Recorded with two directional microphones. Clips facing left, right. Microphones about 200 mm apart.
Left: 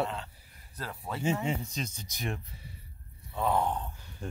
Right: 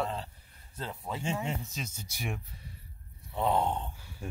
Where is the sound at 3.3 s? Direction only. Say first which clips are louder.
Even; 20° right (ahead or behind).